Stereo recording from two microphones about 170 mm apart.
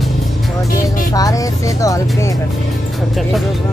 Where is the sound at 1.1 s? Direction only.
20° left (ahead or behind).